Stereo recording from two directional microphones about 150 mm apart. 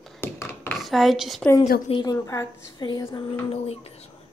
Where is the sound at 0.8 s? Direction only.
Centre (ahead or behind).